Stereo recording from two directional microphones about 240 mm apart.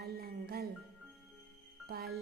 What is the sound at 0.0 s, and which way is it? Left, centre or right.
Music, right.